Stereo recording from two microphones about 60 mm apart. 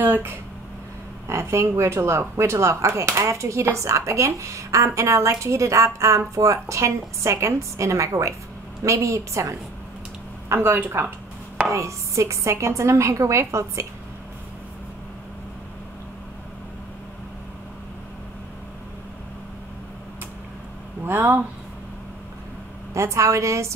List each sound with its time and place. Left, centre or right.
0.0 s a sound: right
1.2 s speech: right
10.5 s speech: right
11.7 s speech: right
21.0 s speech: right
22.9 s speech: right